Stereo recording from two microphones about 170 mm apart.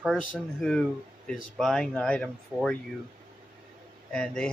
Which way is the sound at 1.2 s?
Centre (ahead or behind).